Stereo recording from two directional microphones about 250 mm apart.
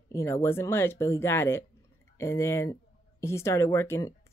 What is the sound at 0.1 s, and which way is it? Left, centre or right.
Speech, centre.